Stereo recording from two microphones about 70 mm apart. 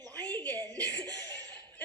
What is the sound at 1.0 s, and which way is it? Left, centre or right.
Laughter, right.